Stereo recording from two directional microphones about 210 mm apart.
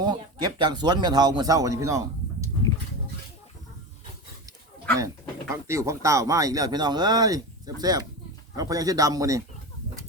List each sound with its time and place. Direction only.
0.1 s speech: 20° right (ahead or behind)
4.9 s speech: 15° right (ahead or behind)